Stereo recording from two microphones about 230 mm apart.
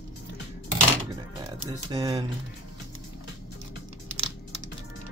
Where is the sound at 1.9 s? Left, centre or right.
Right.